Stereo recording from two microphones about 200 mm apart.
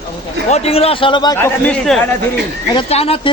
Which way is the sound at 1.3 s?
10° left (ahead or behind).